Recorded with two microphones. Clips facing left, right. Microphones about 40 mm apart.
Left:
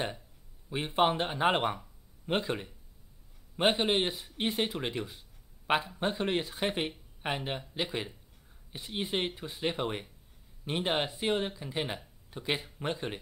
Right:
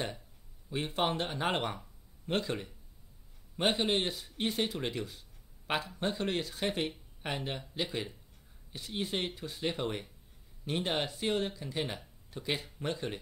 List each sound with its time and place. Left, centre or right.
0.7 s a man's voice: centre